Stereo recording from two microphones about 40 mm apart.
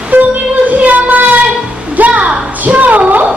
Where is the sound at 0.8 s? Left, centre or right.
Right.